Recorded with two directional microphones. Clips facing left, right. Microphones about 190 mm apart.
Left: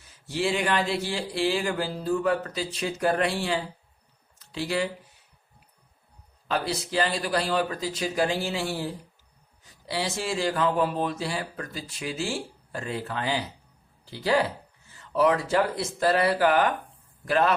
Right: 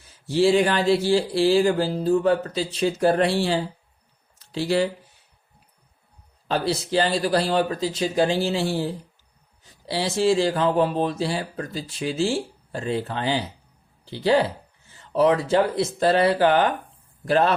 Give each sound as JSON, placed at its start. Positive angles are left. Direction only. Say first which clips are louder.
{"t": 0.3, "sound": "speech", "louder": "right 8 dB", "side_deg": -35}
{"t": 6.5, "sound": "speech", "louder": "right 5 dB", "side_deg": -30}